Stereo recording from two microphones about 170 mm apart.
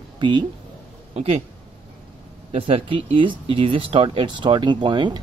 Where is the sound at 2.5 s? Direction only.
35° right (ahead or behind).